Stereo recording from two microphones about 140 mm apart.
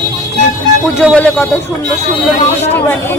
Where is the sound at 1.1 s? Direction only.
10° left (ahead or behind).